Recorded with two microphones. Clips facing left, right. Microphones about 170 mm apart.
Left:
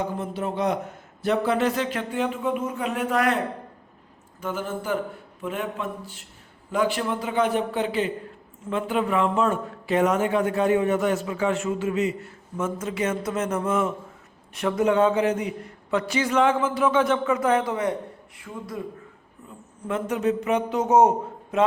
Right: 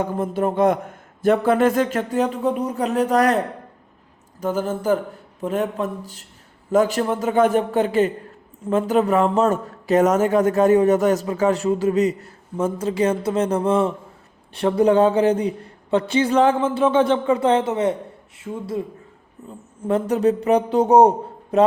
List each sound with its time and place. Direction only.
0.0 s a man's voice: 50° right (ahead or behind)